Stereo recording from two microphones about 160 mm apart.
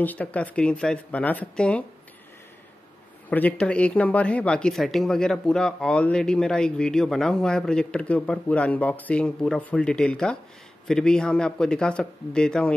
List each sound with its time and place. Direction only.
0.0 s speech: 10° left (ahead or behind)
3.3 s speech: 10° left (ahead or behind)